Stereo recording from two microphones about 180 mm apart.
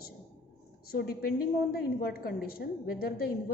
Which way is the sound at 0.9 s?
60° left (ahead or behind).